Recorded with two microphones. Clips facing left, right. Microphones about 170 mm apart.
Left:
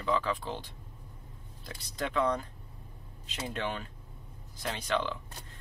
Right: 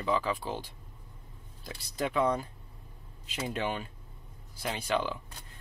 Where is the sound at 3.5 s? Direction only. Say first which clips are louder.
Right 2 dB; 10° right (ahead or behind).